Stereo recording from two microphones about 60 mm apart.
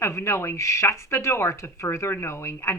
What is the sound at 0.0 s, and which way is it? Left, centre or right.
A woman's voice, left.